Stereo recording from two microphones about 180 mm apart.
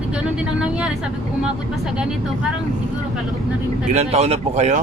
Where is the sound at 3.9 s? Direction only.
35° right (ahead or behind).